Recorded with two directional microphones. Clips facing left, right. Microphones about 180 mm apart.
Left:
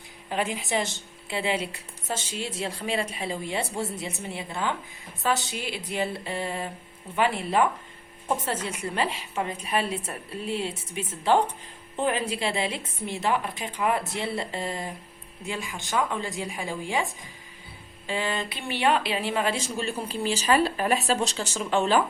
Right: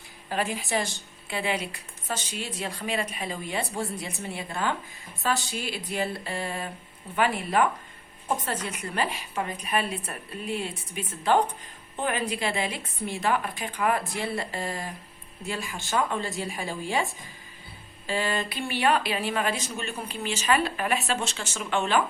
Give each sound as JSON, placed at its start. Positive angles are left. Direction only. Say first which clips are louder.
{"t": 0.3, "sound": "a woman's voice", "louder": "left 1 dB", "side_deg": 20}